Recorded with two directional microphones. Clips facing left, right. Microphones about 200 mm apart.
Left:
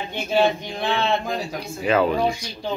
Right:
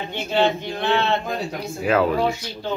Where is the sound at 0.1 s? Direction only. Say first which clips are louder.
Left 1 dB; 10° left (ahead or behind).